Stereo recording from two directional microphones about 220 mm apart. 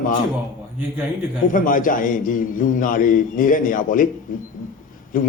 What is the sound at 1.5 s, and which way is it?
A man's voice, 40° left (ahead or behind).